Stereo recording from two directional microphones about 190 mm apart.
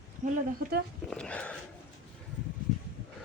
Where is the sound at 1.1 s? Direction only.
5° left (ahead or behind).